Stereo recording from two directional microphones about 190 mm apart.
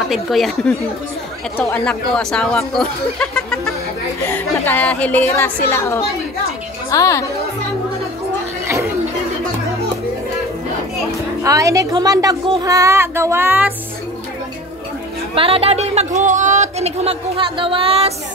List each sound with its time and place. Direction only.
0.1 s speech: centre (ahead or behind); by 7.2 s 15° left (ahead or behind)
8.6 s chatter: 15° right (ahead or behind)
11.4 s speech: 15° right (ahead or behind)
15.3 s speech: 30° right (ahead or behind)